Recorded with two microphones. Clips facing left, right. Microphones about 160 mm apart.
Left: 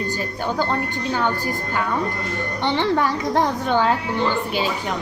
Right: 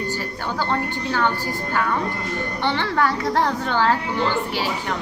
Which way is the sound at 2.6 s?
20° left (ahead or behind).